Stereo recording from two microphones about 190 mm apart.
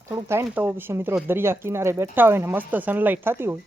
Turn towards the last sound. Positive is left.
turn(degrees=-10)  # may be behind; listen again after turning